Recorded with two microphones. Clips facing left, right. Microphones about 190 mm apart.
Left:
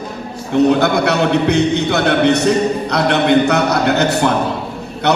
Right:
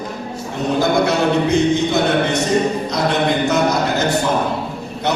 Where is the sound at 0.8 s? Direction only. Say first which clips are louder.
Left 1 dB; 65° left (ahead or behind).